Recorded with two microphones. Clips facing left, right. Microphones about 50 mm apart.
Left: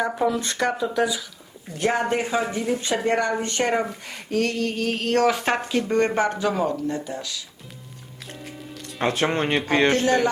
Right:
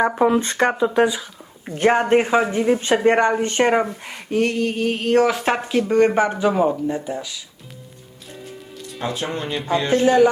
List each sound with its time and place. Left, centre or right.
0.0 s speech: right; by 7.4 s centre
9.0 s speech: left